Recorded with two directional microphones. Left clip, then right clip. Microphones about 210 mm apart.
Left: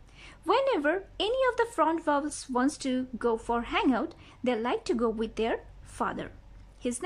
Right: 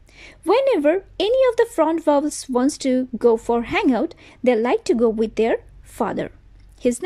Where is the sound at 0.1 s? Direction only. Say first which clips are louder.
Right 8 dB; 15° right (ahead or behind).